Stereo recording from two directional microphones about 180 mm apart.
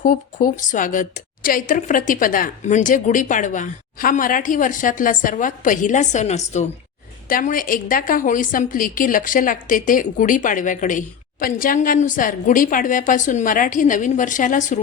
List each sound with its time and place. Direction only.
0.0 s a woman's voice: 50° left (ahead or behind)
7.3 s a woman's voice: 50° left (ahead or behind)